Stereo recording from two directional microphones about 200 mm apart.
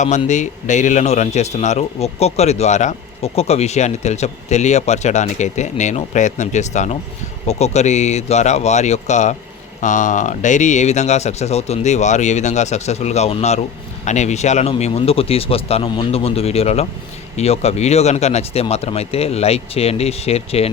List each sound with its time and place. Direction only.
0.0 s speech: 35° left (ahead or behind)